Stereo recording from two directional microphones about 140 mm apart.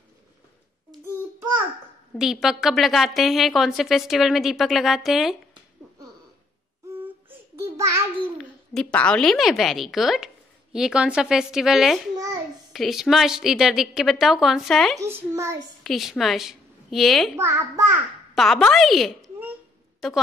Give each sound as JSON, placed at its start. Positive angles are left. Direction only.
{"t": 2.1, "sound": "a woman's voice", "side_deg": -5}
{"t": 7.7, "sound": "babbling", "side_deg": -20}
{"t": 8.4, "sound": "a woman's voice", "side_deg": 10}
{"t": 15.0, "sound": "a child's voice", "side_deg": -20}
{"t": 15.8, "sound": "a woman's voice", "side_deg": 0}
{"t": 17.4, "sound": "a child's voice", "side_deg": -20}
{"t": 18.3, "sound": "a woman's voice", "side_deg": 0}